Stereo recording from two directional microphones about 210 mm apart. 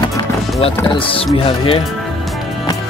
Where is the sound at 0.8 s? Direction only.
25° left (ahead or behind).